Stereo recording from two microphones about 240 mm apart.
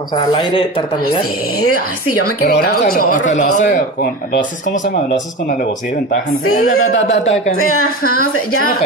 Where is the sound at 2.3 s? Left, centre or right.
Left.